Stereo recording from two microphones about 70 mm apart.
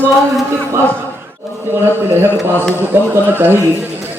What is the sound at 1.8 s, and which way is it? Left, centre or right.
Speech, right.